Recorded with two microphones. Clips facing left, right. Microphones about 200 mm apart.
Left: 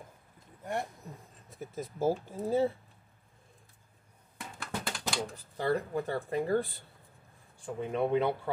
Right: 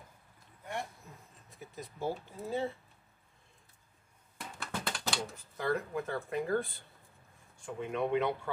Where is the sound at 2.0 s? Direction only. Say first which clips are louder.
Left 7 dB; 40° left (ahead or behind).